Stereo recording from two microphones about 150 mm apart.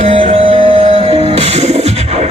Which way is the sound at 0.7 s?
50° right (ahead or behind).